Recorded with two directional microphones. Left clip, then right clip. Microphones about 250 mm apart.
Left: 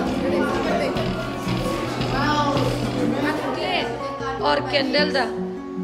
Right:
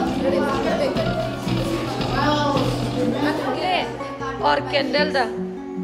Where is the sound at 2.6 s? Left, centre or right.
Left.